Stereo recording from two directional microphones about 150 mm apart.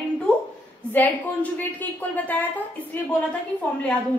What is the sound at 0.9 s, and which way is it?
A woman's voice, 10° left (ahead or behind).